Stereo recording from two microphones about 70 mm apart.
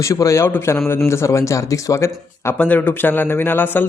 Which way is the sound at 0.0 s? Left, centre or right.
Left.